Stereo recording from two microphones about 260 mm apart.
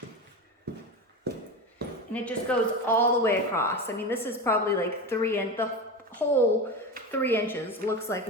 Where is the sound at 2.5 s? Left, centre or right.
Centre.